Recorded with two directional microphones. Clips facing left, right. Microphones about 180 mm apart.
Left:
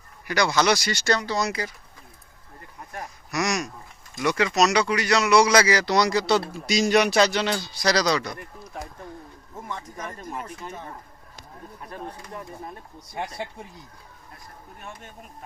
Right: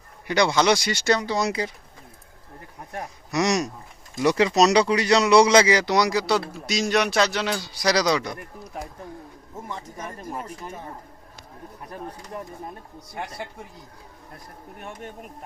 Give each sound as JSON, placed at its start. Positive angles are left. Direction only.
{"t": 0.3, "sound": "speech", "side_deg": -25}
{"t": 2.9, "sound": "speech", "side_deg": -30}
{"t": 14.8, "sound": "speech", "side_deg": -60}